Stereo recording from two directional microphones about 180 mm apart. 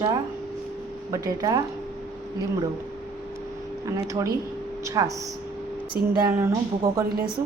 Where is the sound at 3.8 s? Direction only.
20° right (ahead or behind).